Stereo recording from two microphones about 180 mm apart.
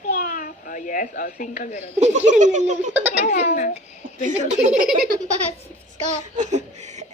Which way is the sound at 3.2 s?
40° left (ahead or behind).